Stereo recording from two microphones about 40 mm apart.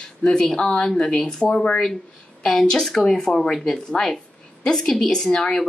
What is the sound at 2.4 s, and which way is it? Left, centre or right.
Speech, centre.